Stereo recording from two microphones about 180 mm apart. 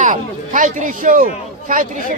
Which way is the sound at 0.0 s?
45° right (ahead or behind).